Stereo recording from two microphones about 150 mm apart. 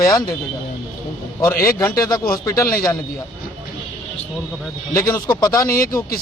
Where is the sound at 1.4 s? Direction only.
20° left (ahead or behind).